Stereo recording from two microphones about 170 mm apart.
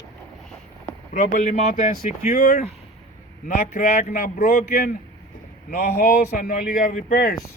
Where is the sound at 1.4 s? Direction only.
45° left (ahead or behind).